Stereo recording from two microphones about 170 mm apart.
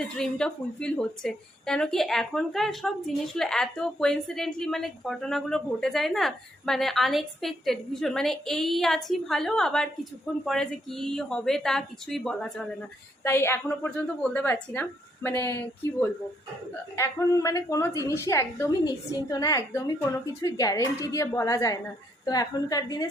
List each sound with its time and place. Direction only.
0.0 s a woman's voice: 5° left (ahead or behind)
13.2 s a woman's voice: 15° left (ahead or behind)
16.9 s a woman's voice: 15° left (ahead or behind)